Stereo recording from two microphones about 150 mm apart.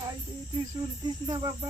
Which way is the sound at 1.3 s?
25° right (ahead or behind).